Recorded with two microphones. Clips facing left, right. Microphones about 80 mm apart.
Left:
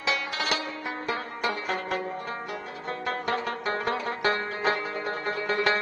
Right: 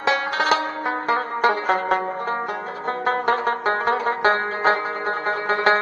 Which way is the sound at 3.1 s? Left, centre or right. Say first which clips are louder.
Right 9 dB; right.